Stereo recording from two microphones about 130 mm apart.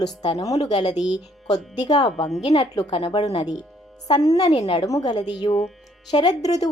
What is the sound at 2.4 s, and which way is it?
Speech, 55° left (ahead or behind).